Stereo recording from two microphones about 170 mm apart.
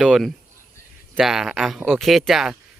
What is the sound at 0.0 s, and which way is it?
Speech, centre (ahead or behind).